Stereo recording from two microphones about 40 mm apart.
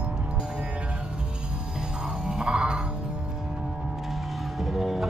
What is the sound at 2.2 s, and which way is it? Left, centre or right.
Music, right.